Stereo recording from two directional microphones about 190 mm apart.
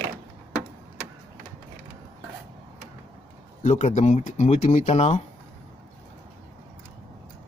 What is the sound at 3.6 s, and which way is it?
Speech, 35° left (ahead or behind).